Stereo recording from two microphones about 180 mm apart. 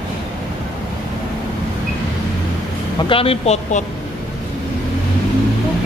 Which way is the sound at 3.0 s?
30° left (ahead or behind).